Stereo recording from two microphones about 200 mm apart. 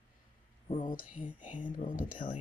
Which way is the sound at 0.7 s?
30° left (ahead or behind).